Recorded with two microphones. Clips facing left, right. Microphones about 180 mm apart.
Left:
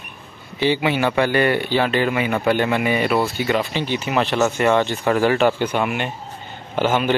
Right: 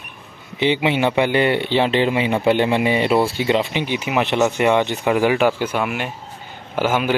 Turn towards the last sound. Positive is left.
turn(degrees=-10)  # may be behind; listen again after turning